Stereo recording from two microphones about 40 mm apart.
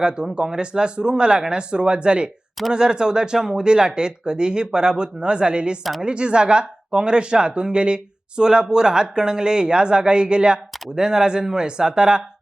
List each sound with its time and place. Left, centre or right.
0.0 s speech: right